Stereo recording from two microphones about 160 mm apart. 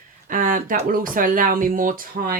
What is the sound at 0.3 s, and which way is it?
Speech, 60° right (ahead or behind).